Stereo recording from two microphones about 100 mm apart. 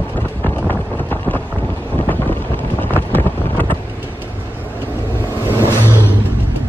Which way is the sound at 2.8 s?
20° left (ahead or behind).